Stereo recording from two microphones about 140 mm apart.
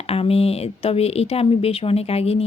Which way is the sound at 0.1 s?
45° left (ahead or behind).